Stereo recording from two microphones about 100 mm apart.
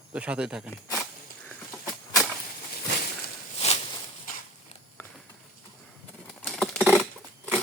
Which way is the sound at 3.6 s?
90° left.